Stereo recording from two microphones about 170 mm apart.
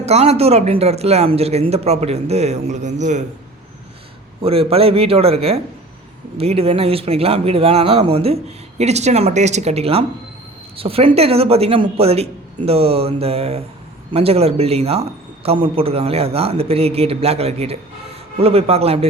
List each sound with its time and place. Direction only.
0.0 s speech: 40° right (ahead or behind)
4.4 s speech: 35° right (ahead or behind)